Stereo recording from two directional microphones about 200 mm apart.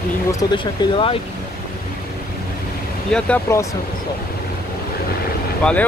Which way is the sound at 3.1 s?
5° left (ahead or behind).